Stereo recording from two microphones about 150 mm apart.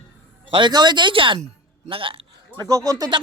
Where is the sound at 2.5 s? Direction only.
25° right (ahead or behind).